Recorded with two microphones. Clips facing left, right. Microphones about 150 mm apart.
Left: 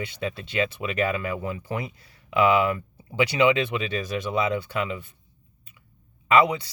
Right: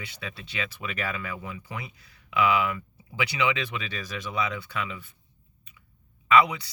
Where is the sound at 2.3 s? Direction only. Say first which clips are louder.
Left 4 dB; 30° left (ahead or behind).